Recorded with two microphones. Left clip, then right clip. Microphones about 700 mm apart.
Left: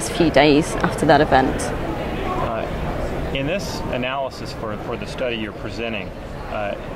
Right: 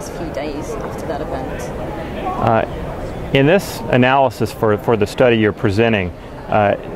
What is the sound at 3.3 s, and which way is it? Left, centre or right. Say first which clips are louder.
Speech: right 13 dB; right.